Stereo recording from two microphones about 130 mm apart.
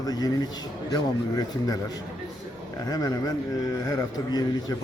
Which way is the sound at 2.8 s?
30° left (ahead or behind).